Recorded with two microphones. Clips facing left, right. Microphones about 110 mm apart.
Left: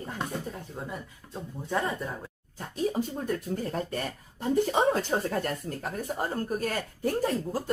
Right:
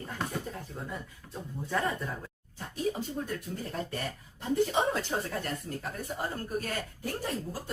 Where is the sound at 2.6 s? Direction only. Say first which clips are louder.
Left 4 dB; 45° left (ahead or behind).